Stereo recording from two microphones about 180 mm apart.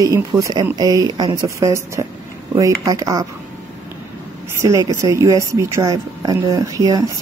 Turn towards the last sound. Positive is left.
turn(degrees=-20)  # may be behind; listen again after turning